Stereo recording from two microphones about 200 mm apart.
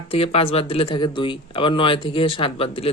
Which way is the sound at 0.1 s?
30° left (ahead or behind).